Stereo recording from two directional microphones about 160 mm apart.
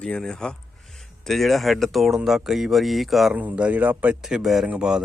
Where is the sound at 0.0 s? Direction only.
5° left (ahead or behind).